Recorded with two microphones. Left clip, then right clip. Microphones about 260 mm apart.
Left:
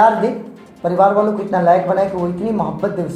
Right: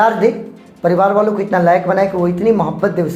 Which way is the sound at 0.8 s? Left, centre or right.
Right.